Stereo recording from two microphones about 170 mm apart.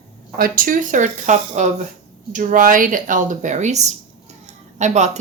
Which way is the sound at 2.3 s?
55° right (ahead or behind).